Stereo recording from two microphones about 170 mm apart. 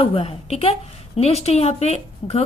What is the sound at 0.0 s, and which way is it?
A woman's voice, 35° left (ahead or behind).